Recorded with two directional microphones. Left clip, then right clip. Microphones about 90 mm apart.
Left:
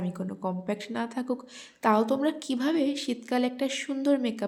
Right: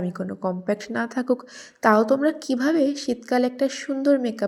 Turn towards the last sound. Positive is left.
turn(degrees=-20)  # may be behind; listen again after turning